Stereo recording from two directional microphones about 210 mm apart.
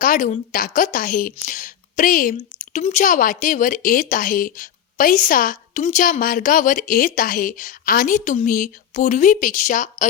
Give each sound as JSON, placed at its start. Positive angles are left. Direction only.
{"t": 0.0, "sound": "a woman's voice", "side_deg": 40}